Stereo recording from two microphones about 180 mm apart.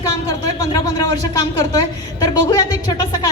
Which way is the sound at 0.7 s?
20° left (ahead or behind).